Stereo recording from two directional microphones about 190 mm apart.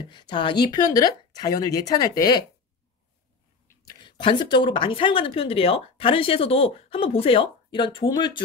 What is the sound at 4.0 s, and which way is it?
Speech, 25° left (ahead or behind).